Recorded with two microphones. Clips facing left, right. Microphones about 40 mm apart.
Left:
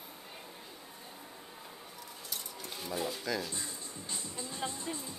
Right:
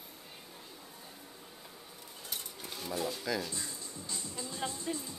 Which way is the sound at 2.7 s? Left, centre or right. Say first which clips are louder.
Even; centre.